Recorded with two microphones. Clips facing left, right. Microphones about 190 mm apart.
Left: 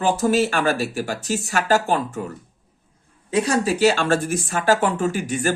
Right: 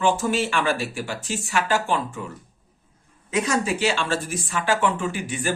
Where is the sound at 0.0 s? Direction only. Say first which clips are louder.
Left 3 dB; 40° left (ahead or behind).